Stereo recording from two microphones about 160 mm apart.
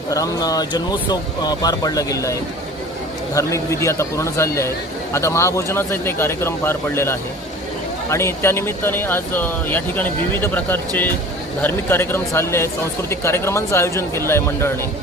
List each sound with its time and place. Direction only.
0.1 s speech: 20° left (ahead or behind)
3.3 s speech: 20° left (ahead or behind)